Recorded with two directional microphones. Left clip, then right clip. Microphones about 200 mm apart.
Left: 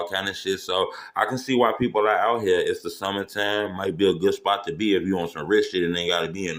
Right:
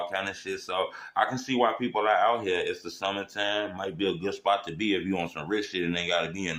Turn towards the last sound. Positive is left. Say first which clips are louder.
# left 3 dB
turn(degrees=15)  # may be behind; listen again after turning